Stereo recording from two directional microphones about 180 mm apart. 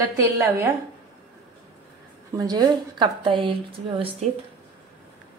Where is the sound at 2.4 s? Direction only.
20° right (ahead or behind).